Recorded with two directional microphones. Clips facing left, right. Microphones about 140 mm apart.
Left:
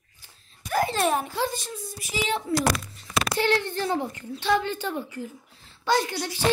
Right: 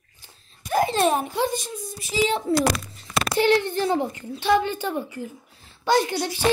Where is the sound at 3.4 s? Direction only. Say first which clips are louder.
Right 6 dB; 15° right (ahead or behind).